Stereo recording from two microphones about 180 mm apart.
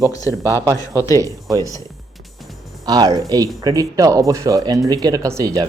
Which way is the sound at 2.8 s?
20° right (ahead or behind).